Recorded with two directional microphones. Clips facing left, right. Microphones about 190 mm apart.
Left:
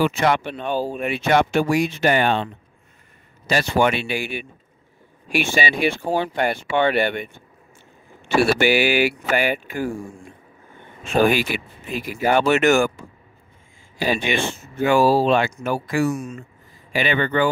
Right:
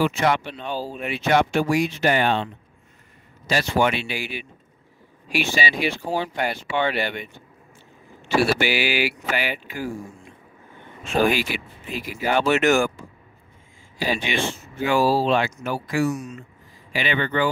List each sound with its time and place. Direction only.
0.0 s speech: 55° left (ahead or behind)
11.2 s speech: 50° left (ahead or behind)
13.9 s speech: 50° left (ahead or behind)